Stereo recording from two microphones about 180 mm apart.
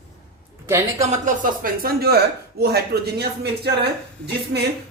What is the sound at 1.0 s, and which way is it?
Speech, 45° right (ahead or behind).